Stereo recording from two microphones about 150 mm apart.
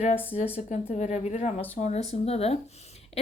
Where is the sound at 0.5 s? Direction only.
45° left (ahead or behind).